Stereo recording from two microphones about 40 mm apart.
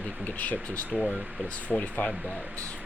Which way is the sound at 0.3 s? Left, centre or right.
Left.